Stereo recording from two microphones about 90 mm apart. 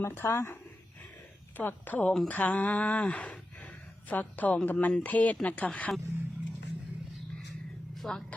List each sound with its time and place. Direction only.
0.0 s speech: 30° left (ahead or behind)
7.9 s speech: 5° left (ahead or behind)